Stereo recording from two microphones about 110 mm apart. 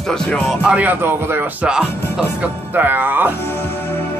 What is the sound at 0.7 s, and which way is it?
Speech, 15° right (ahead or behind).